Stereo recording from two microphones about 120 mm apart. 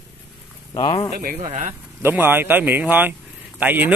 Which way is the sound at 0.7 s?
40° left (ahead or behind).